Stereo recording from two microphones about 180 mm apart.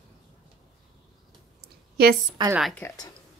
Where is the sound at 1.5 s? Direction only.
60° right (ahead or behind).